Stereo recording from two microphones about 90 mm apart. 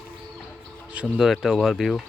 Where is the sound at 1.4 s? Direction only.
5° right (ahead or behind).